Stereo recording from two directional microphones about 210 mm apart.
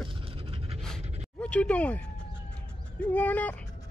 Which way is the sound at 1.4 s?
5° left (ahead or behind).